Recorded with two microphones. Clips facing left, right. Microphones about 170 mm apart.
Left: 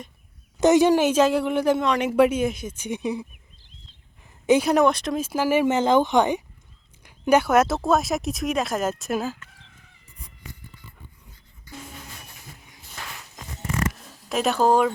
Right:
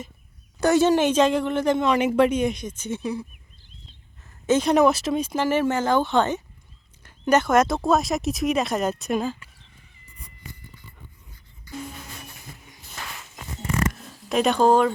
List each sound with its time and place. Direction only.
0.6 s speech: 15° left (ahead or behind)
1.9 s speech: 5° right (ahead or behind)
2.1 s speech: 5° left (ahead or behind)
4.4 s speech: 10° left (ahead or behind)
4.7 s speech: centre (ahead or behind)
9.6 s chicken: 90° left
14.3 s speech: 5° left (ahead or behind)